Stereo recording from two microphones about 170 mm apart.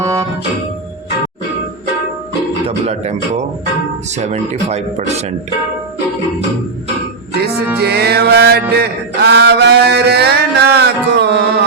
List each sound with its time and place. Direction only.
0.0 s music: 20° right (ahead or behind)
2.6 s a man's voice: 40° right (ahead or behind)
4.2 s speech: 45° right (ahead or behind)
7.8 s music: 70° right (ahead or behind)
8.7 s mantra: 75° right (ahead or behind)